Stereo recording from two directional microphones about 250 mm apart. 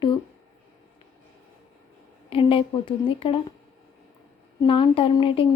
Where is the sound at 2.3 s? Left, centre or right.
Left.